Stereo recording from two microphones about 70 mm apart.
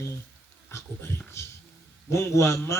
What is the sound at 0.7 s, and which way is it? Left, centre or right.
Speech, left.